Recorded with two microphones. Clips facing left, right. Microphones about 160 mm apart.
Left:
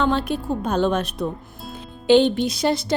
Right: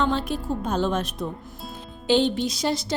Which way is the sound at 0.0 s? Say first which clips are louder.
Left 3 dB; 60° left (ahead or behind).